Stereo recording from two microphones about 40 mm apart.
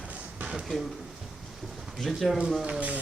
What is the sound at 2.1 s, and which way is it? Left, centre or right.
Speech, centre.